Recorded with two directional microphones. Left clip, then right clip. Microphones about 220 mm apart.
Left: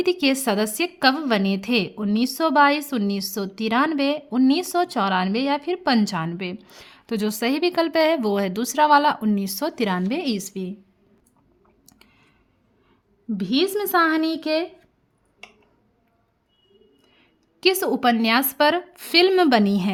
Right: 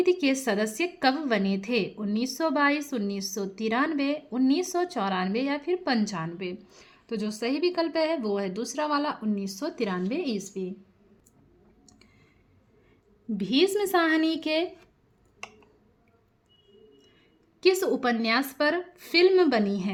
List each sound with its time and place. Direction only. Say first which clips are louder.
0.0 s a woman's voice: left 3 dB; 40° left (ahead or behind)
13.3 s speech: left 2 dB; 30° left (ahead or behind)
17.6 s a woman's voice: left 4 dB; 35° left (ahead or behind)